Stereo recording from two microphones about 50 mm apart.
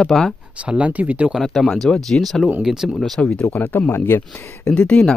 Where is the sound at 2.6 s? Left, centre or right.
Centre.